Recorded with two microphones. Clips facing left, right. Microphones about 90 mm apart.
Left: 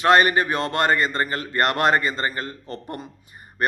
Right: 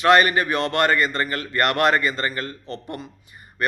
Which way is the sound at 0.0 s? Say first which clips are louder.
Even; 35° left (ahead or behind).